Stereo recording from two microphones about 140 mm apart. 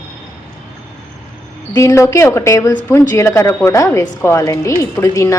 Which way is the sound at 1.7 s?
20° left (ahead or behind).